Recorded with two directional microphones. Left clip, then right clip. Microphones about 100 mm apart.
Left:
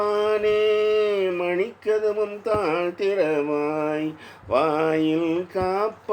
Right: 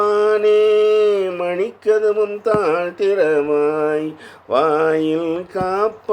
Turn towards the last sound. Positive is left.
turn(degrees=-40)  # may be behind; listen again after turning